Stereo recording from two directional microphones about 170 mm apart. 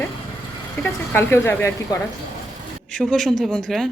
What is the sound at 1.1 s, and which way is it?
Speech, 10° left (ahead or behind).